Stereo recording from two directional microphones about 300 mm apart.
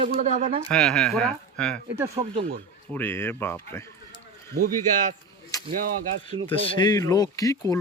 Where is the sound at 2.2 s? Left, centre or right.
Right.